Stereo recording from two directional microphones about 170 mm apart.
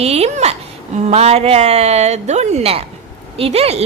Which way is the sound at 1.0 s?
40° right (ahead or behind).